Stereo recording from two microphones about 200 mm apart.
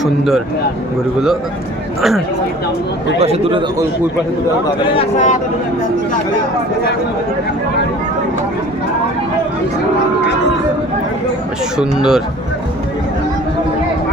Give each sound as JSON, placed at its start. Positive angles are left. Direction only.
{"t": 0.0, "sound": "speech", "side_deg": 0}
{"t": 2.0, "sound": "speech", "side_deg": 0}
{"t": 3.2, "sound": "a man's voice", "side_deg": -30}
{"t": 4.9, "sound": "speech", "side_deg": 35}
{"t": 11.8, "sound": "speech", "side_deg": -5}